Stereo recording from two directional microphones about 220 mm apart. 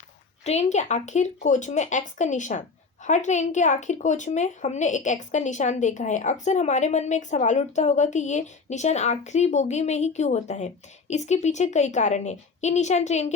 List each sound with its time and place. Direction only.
0.4 s speech: 30° left (ahead or behind)